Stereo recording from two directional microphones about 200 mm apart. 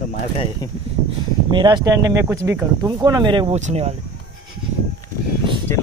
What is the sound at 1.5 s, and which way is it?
Speech, 20° right (ahead or behind).